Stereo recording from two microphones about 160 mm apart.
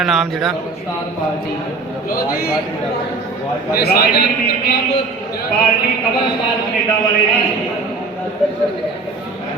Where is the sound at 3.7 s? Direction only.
75° left (ahead or behind).